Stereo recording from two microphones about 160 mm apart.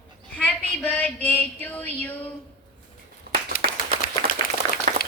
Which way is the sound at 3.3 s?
80° right.